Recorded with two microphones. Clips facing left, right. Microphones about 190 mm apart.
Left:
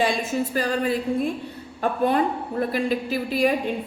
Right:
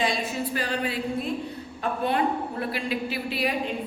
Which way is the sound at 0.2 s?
40° left (ahead or behind).